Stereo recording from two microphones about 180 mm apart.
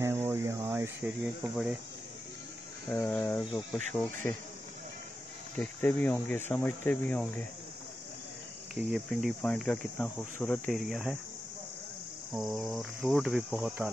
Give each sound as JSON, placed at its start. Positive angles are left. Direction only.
{"t": 0.0, "sound": "cricket", "side_deg": -10}
{"t": 3.0, "sound": "cricket", "side_deg": 15}
{"t": 5.6, "sound": "cricket", "side_deg": 10}
{"t": 8.7, "sound": "cricket", "side_deg": 0}
{"t": 10.8, "sound": "cricket", "side_deg": 0}
{"t": 12.4, "sound": "cricket", "side_deg": 0}